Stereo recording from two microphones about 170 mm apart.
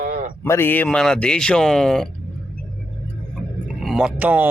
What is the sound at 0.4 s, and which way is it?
Speech, 15° left (ahead or behind).